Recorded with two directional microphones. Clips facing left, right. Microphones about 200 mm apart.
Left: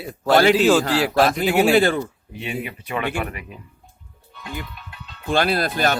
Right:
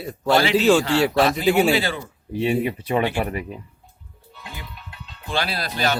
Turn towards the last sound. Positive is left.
turn(degrees=50)  # may be behind; listen again after turning